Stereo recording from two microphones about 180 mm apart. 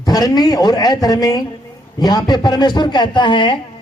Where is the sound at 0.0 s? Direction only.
20° left (ahead or behind).